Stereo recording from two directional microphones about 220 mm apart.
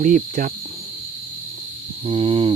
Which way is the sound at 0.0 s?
35° right (ahead or behind).